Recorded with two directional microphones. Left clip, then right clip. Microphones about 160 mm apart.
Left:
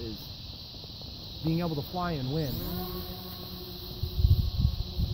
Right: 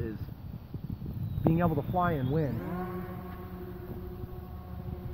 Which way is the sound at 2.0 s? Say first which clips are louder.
Right 4 dB; 35° right (ahead or behind).